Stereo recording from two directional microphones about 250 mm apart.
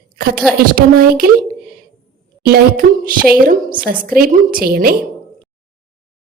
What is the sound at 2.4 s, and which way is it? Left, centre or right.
Speech, right.